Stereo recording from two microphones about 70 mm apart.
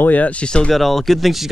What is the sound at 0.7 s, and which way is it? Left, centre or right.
Speech, centre.